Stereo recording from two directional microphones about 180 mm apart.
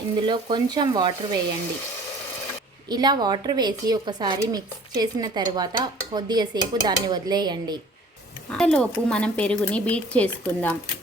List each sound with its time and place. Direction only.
0.2 s speech: 25° right (ahead or behind)
2.9 s speech: 25° right (ahead or behind)
8.4 s speech: 5° left (ahead or behind)